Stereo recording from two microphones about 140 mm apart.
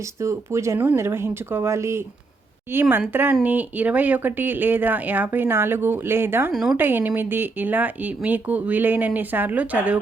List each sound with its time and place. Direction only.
0.2 s speech: 20° right (ahead or behind)
6.5 s a woman's voice: centre (ahead or behind)
6.7 s speech: 15° right (ahead or behind)